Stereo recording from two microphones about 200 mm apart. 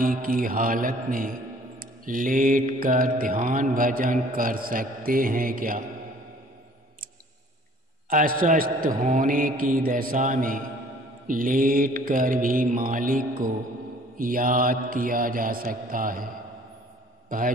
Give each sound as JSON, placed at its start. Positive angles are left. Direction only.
{"t": 0.0, "sound": "mantra", "side_deg": -45}
{"t": 8.1, "sound": "mantra", "side_deg": -45}